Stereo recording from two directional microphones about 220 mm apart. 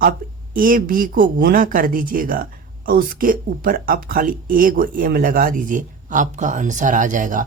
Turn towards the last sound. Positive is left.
turn(degrees=-35)  # may be behind; listen again after turning